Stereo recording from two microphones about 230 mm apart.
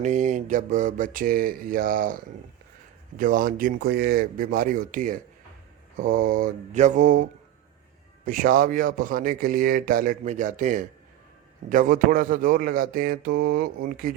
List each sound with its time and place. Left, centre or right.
0.0 s a man's voice: right
3.2 s a man's voice: right